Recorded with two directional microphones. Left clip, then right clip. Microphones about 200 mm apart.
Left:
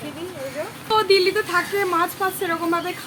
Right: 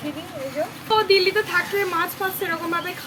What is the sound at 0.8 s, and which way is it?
Speech, 15° left (ahead or behind).